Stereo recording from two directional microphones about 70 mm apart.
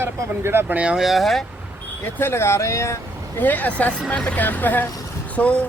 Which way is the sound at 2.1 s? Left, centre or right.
Left.